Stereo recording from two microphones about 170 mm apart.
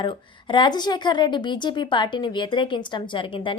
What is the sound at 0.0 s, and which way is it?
A woman's voice, 30° left (ahead or behind).